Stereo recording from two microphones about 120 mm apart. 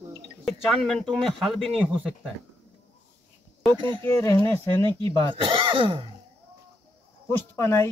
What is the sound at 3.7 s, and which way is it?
Speech, 45° right (ahead or behind).